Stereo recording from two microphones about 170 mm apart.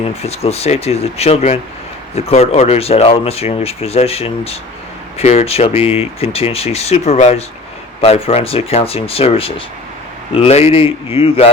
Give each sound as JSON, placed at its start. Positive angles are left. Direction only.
{"t": 0.2, "sound": "speech", "side_deg": 35}